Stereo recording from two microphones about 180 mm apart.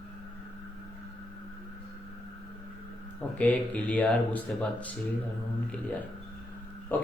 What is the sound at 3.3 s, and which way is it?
Speech, 10° left (ahead or behind).